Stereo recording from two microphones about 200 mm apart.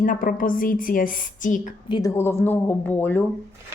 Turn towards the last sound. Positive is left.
turn(degrees=10)  # may be behind; listen again after turning